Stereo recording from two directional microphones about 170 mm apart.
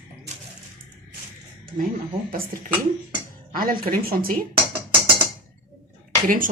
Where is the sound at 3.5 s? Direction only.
55° right (ahead or behind).